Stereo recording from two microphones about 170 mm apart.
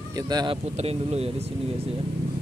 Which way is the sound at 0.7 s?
40° right (ahead or behind).